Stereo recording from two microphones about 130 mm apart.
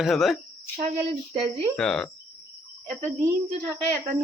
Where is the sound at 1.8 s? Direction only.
5° left (ahead or behind).